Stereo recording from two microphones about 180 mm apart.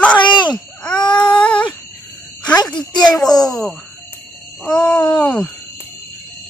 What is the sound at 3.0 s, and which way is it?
Speech, 5° left (ahead or behind).